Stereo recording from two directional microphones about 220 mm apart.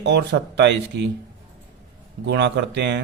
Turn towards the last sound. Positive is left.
turn(degrees=-50)  # may be behind; listen again after turning